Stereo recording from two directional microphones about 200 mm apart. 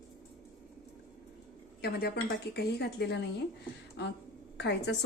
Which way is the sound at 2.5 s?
55° left (ahead or behind).